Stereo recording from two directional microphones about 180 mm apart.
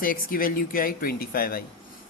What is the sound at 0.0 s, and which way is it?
Speech, 50° left (ahead or behind).